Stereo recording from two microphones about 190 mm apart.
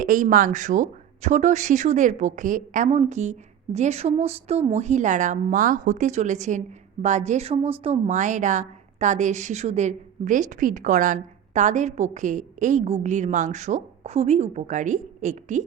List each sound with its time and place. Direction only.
0.0 s speech: 45° right (ahead or behind)